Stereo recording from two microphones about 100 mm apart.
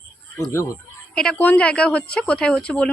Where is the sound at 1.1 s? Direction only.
10° left (ahead or behind).